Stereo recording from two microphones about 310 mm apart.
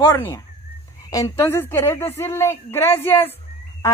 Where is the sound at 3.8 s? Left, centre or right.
Centre.